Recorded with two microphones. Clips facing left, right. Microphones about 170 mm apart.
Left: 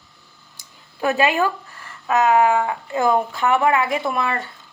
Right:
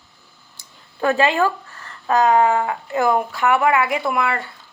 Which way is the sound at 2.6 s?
20° left (ahead or behind).